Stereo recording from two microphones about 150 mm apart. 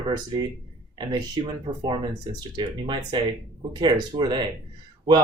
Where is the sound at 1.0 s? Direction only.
30° right (ahead or behind).